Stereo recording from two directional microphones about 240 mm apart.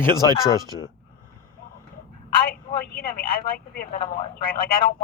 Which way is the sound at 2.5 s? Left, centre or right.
Left.